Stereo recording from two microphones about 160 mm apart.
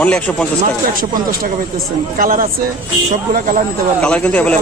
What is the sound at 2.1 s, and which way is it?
Speech, 60° right (ahead or behind).